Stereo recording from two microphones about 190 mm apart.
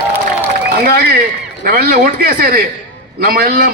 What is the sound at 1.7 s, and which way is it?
A man's voice, 50° right (ahead or behind).